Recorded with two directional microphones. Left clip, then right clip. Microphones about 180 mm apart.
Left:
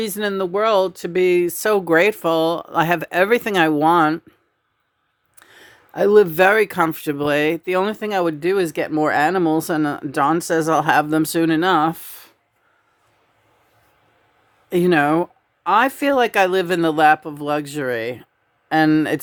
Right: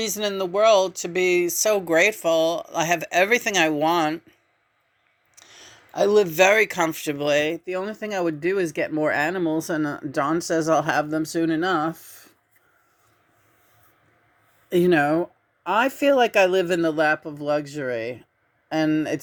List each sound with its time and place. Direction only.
0.0 s speech: 50° left (ahead or behind)
5.9 s speech: 45° left (ahead or behind)
7.9 s speech: 20° left (ahead or behind)
14.7 s speech: 10° left (ahead or behind); by 19.2 s 30° left (ahead or behind)